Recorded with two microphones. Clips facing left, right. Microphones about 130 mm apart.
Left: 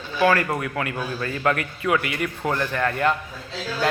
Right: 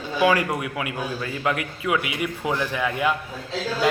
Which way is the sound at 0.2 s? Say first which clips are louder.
Even; 10° right (ahead or behind).